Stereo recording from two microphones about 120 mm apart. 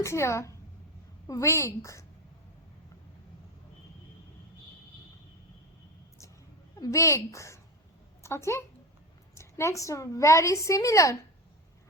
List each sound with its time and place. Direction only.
0.0 s a woman's voice: 20° left (ahead or behind)
6.7 s a woman's voice: 30° left (ahead or behind)